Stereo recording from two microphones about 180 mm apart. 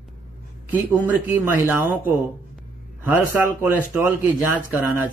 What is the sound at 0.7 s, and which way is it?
Speech, 10° right (ahead or behind).